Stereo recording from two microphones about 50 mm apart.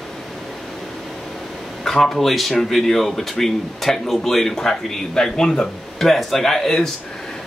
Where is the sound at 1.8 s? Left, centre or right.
Centre.